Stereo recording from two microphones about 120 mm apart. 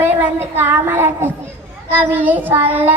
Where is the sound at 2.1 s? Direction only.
15° right (ahead or behind).